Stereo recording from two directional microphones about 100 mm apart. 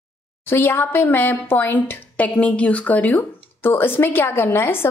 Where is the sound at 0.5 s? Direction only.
20° left (ahead or behind).